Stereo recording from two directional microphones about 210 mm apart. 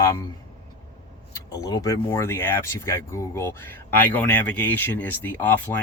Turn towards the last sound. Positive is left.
turn(degrees=10)  # may be behind; listen again after turning